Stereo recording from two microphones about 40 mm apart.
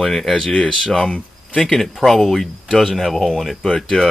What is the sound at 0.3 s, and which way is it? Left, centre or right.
Speech, centre.